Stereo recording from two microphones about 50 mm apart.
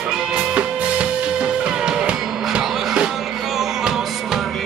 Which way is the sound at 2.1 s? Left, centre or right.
Centre.